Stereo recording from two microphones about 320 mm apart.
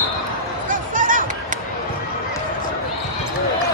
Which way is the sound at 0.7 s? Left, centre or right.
Right.